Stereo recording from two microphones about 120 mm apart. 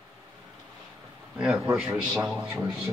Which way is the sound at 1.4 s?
5° right (ahead or behind).